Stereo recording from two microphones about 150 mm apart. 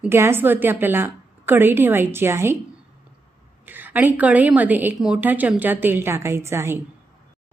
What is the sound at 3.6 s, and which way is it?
A woman's voice, 10° right (ahead or behind).